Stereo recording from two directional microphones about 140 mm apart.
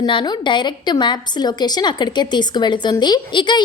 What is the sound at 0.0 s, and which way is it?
A woman's voice, 30° left (ahead or behind).